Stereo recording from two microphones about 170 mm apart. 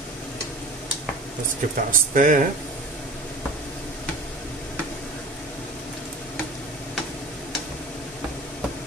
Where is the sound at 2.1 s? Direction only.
50° right (ahead or behind).